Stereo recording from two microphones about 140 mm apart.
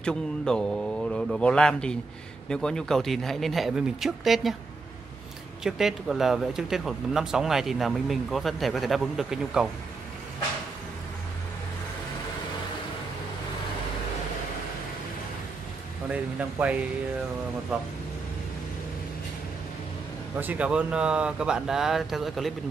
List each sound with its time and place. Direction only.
0.0 s speech: 5° left (ahead or behind)
5.6 s speech: 5° right (ahead or behind)
16.1 s speech: 10° right (ahead or behind)
20.3 s speech: 10° right (ahead or behind)